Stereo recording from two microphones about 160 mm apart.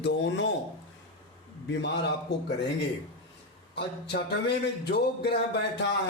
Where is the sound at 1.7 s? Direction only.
90° left.